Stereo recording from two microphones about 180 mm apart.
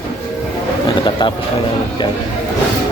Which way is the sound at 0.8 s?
25° left (ahead or behind).